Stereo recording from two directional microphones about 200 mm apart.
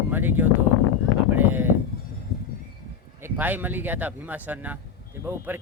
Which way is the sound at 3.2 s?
10° right (ahead or behind).